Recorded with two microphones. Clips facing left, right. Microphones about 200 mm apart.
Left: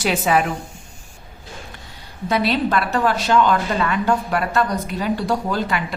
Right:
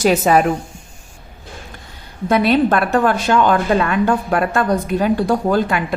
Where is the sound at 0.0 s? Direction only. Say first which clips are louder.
Right 5 dB; 40° right (ahead or behind).